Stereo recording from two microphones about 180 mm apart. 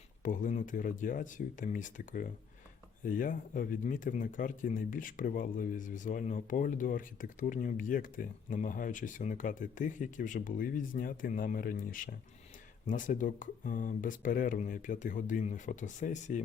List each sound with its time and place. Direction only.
0.2 s speech: 45° left (ahead or behind)